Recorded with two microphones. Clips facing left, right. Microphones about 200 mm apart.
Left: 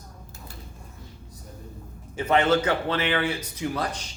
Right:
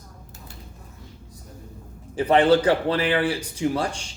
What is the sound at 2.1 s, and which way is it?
Speech, 35° right (ahead or behind).